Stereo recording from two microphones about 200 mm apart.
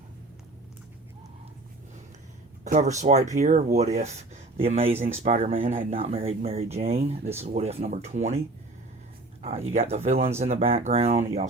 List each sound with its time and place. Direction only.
2.6 s speech: 35° right (ahead or behind)
9.4 s speech: 30° right (ahead or behind)